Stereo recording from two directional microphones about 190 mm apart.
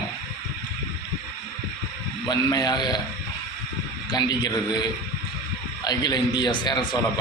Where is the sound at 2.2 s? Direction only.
20° left (ahead or behind).